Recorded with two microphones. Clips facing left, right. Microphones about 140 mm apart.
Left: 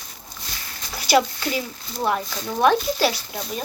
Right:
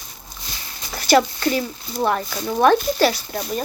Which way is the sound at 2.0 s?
Centre (ahead or behind).